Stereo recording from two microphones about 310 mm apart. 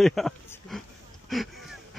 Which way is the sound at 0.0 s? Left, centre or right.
Centre.